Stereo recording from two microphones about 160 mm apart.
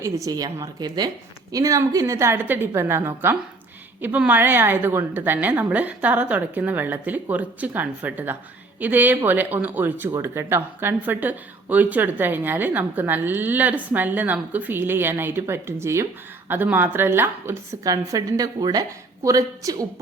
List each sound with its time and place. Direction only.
0.0 s a woman's voice: 20° right (ahead or behind)